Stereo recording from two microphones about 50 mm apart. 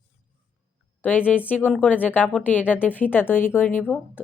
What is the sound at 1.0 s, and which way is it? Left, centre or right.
Speech, left.